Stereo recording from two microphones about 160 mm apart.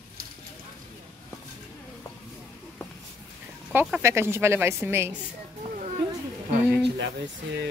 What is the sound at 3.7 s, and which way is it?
A woman's voice, 15° right (ahead or behind).